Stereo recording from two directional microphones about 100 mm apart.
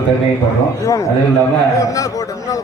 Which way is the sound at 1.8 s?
35° left (ahead or behind).